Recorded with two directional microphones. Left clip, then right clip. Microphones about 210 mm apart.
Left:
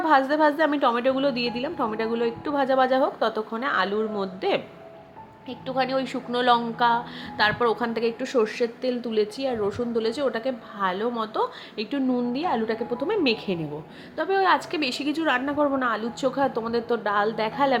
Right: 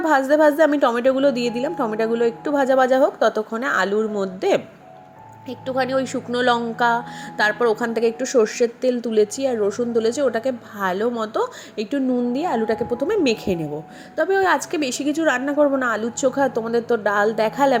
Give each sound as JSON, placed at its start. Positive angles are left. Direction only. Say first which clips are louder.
{"t": 0.0, "sound": "a woman's voice", "louder": "right 4 dB", "side_deg": -20}